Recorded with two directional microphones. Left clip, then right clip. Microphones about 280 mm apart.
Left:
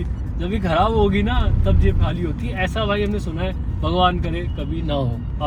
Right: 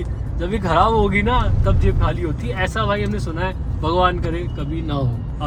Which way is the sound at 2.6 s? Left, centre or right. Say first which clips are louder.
Even; centre.